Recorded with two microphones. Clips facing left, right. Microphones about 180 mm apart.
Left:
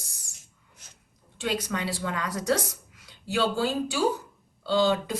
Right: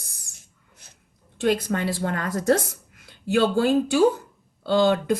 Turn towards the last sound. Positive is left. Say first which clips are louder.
# right 4 dB
turn(degrees=-55)  # may be behind; listen again after turning